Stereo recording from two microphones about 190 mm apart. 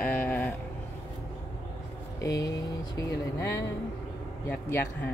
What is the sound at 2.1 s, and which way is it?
Speech, 15° left (ahead or behind).